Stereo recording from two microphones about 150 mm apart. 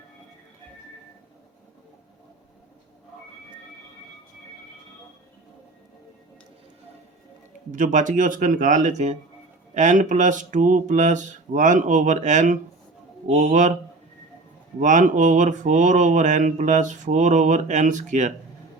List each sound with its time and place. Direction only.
7.7 s mantra: 55° right (ahead or behind)
14.8 s mantra: 55° right (ahead or behind)